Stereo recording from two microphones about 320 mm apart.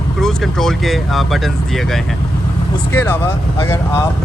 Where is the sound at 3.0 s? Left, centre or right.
Centre.